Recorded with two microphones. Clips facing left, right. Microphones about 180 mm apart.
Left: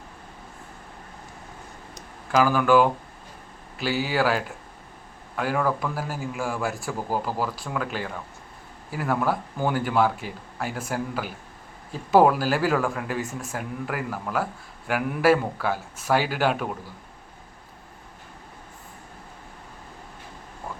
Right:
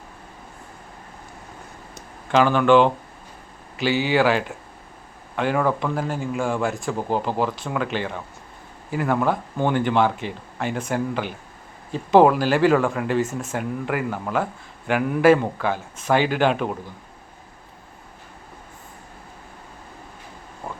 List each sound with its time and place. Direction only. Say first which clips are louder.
2.4 s speech: right 3 dB; 5° left (ahead or behind)
4.1 s speech: right 4 dB; centre (ahead or behind)
7.1 s speech: right 4 dB; 25° right (ahead or behind)
7.4 s speech: right 4 dB; centre (ahead or behind)